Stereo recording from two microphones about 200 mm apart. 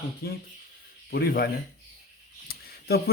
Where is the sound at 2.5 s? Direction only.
50° left (ahead or behind).